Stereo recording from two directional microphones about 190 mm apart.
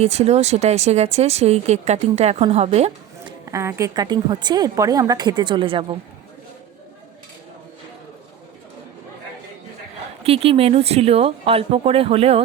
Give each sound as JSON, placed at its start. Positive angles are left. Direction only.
{"t": 0.0, "sound": "speech", "side_deg": -35}
{"t": 3.4, "sound": "a woman's voice", "side_deg": -15}
{"t": 10.2, "sound": "speech", "side_deg": -30}